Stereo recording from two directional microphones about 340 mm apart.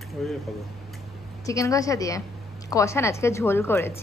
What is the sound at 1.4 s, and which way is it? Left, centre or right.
A woman's voice, centre.